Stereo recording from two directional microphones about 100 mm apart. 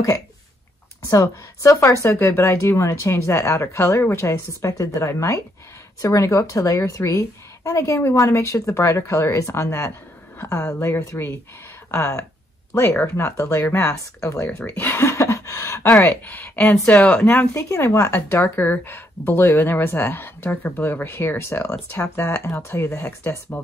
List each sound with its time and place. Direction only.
1.0 s a woman's voice: 35° left (ahead or behind)
14.6 s a sound: 25° left (ahead or behind)
16.0 s speech: 20° left (ahead or behind)
17.6 s a woman's voice: 30° left (ahead or behind)